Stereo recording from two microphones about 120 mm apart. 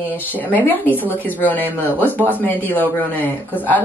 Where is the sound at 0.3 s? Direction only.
15° left (ahead or behind).